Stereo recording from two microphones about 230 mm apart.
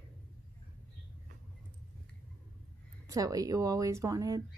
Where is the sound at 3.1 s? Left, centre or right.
Centre.